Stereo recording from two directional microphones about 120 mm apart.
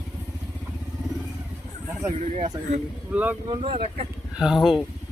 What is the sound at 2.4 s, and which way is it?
Speech, 90° right.